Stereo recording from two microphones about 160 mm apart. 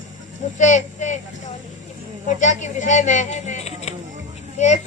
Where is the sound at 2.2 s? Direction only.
50° left (ahead or behind).